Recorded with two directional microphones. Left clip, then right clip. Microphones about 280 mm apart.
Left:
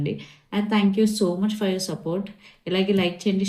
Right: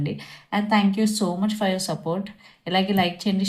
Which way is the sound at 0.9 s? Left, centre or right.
Right.